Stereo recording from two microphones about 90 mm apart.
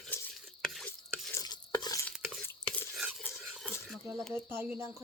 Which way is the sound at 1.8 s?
40° left (ahead or behind).